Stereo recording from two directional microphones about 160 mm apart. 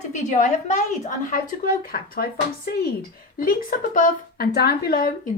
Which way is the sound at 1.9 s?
65° left (ahead or behind).